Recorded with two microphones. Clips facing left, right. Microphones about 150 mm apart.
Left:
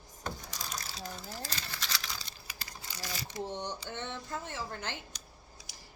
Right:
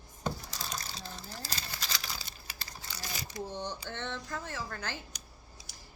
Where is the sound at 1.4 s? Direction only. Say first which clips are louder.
Left 1 dB; 35° right (ahead or behind).